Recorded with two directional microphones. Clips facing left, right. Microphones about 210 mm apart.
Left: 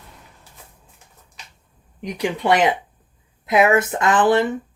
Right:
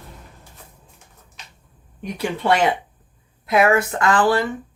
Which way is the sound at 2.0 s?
15° left (ahead or behind).